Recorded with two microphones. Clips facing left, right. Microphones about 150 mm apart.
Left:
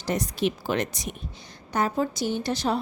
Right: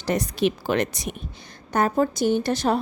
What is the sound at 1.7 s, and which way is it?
A woman's voice, 50° right (ahead or behind).